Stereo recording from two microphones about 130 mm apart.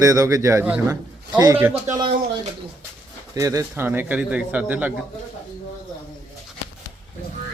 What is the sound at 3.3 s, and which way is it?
Speech, 25° right (ahead or behind).